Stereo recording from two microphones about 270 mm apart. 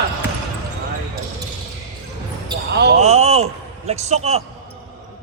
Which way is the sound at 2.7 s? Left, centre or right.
Right.